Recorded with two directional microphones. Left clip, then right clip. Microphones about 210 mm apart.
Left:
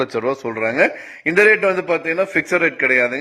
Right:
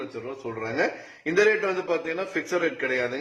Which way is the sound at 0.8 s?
30° left (ahead or behind).